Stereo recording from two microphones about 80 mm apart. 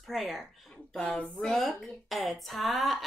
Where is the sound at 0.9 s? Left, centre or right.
Centre.